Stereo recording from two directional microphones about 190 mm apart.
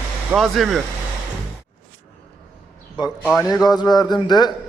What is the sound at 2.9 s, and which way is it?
Speech, 5° right (ahead or behind).